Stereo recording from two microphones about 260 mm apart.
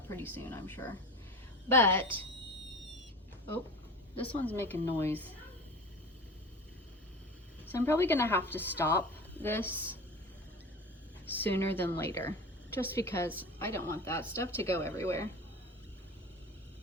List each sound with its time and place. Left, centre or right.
0.1 s a woman's voice: centre
4.1 s a woman's voice: left
4.4 s a woman's voice: centre
7.6 s a woman's voice: centre
11.3 s a woman's voice: centre